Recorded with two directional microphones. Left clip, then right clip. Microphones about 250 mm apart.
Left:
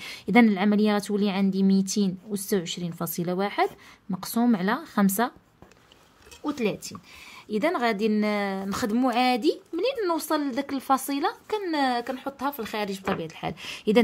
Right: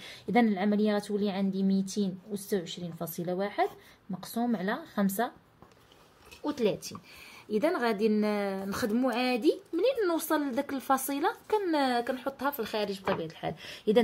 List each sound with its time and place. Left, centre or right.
0.3 s speech: left
1.8 s speech: left
2.3 s speech: left
6.4 s a woman's voice: left